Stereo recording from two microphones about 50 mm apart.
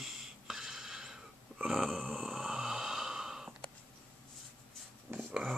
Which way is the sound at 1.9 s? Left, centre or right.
Right.